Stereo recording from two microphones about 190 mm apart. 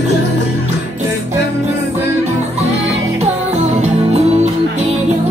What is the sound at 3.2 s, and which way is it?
Music, 35° right (ahead or behind).